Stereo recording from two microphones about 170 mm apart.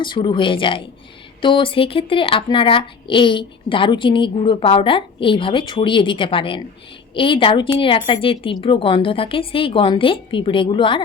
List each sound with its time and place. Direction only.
0.0 s speech: 30° left (ahead or behind)